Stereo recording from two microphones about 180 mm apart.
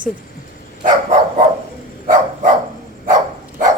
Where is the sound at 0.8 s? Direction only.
45° right (ahead or behind).